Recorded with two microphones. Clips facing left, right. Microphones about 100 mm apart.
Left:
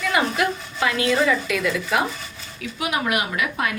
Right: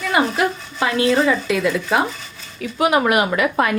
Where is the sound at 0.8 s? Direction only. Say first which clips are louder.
Right 4 dB; 30° right (ahead or behind).